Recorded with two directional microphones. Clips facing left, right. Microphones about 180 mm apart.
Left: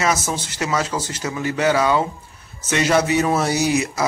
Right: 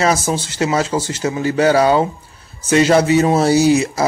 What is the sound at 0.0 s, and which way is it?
Speech, 30° right (ahead or behind).